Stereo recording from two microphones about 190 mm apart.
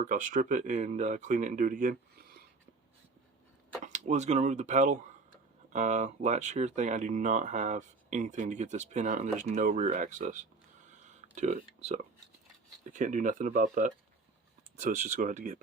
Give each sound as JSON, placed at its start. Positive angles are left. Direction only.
{"t": 0.0, "sound": "speech", "side_deg": -45}
{"t": 3.8, "sound": "speech", "side_deg": -40}